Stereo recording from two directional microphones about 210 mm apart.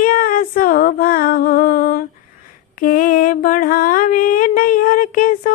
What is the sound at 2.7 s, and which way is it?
Mantra, 40° left (ahead or behind).